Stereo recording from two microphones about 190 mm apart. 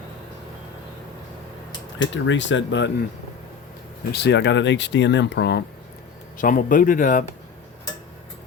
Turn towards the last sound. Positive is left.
turn(degrees=45)  # may be behind; listen again after turning